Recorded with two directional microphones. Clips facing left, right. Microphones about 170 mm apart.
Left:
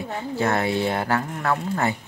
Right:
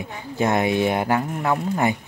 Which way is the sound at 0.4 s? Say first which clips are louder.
Right 3 dB; 15° right (ahead or behind).